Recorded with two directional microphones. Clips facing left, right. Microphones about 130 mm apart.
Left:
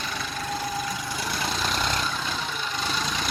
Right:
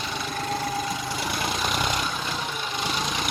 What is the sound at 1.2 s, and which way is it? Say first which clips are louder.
Vehicle: even; 15° right (ahead or behind).